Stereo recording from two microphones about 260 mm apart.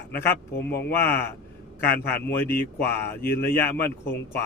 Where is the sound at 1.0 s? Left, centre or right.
Centre.